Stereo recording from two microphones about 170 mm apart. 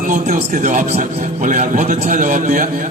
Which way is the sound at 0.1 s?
45° right (ahead or behind).